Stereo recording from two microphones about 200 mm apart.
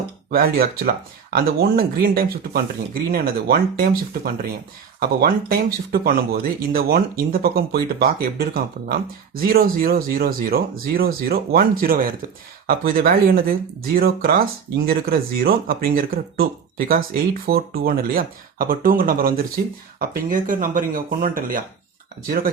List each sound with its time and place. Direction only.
0.3 s speech: 50° right (ahead or behind)